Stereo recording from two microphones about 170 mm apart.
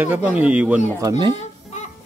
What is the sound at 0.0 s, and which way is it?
Speech, 10° right (ahead or behind).